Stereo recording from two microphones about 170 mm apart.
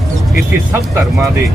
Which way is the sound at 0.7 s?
15° right (ahead or behind).